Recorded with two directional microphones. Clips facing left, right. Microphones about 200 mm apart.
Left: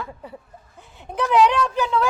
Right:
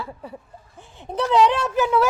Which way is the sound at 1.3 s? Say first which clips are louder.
Left 1 dB; 20° right (ahead or behind).